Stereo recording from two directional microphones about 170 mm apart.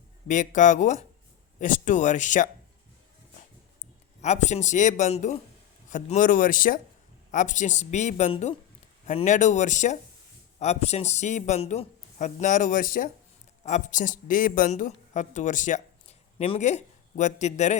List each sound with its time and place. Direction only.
0.3 s a man's voice: 50° left (ahead or behind)
4.2 s a man's voice: 45° left (ahead or behind)
13.7 s speech: 45° left (ahead or behind)